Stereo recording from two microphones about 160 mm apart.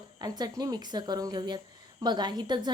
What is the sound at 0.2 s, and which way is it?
A woman's voice, 25° right (ahead or behind).